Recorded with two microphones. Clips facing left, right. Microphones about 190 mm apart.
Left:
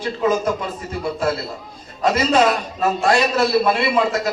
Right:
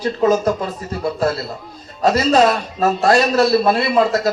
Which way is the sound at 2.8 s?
40° right (ahead or behind).